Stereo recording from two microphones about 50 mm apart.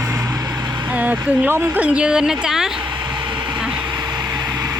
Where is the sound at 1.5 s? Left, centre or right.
Right.